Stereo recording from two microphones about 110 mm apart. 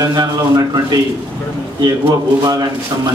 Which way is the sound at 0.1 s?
35° right (ahead or behind).